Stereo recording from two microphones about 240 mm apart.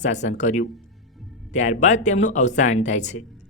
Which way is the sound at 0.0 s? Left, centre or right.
Left.